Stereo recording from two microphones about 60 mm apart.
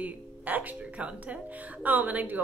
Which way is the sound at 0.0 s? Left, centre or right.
Right.